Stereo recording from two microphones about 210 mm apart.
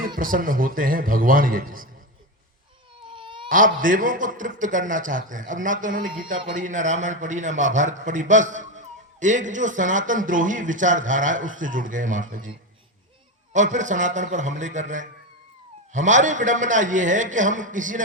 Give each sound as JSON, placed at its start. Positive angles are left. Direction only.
{"t": 0.2, "sound": "a man's voice", "side_deg": -40}
{"t": 3.1, "sound": "baby cry", "side_deg": -25}
{"t": 3.5, "sound": "a man's voice", "side_deg": -40}